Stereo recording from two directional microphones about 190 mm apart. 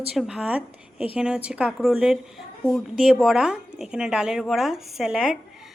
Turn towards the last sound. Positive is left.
turn(degrees=-5)  # may be behind; listen again after turning